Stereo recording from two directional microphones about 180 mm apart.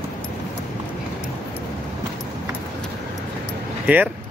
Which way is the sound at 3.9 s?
10° right (ahead or behind).